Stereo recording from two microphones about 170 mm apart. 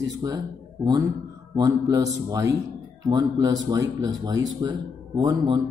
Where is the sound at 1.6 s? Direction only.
20° right (ahead or behind).